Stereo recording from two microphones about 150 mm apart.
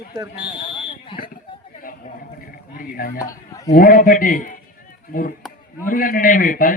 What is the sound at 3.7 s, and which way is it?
A man's voice, 75° left (ahead or behind).